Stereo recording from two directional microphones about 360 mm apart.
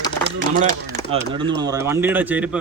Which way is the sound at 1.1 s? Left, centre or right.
Centre.